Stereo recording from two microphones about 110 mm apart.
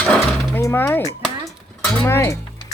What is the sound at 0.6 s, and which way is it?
Speech, 25° left (ahead or behind).